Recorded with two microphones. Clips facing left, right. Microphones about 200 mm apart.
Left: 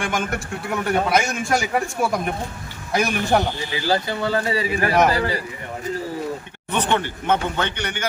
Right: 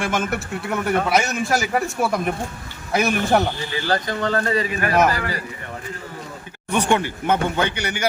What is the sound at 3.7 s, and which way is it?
Speech, 10° left (ahead or behind).